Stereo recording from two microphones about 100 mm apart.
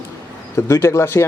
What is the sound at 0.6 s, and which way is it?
Speech, 30° left (ahead or behind).